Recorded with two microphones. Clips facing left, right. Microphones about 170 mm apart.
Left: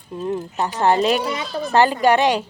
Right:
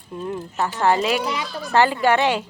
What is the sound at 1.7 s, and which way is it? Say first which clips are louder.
Speech: left 2 dB; 15° left (ahead or behind).